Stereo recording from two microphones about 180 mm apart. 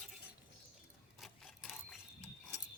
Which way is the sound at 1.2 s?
Centre (ahead or behind).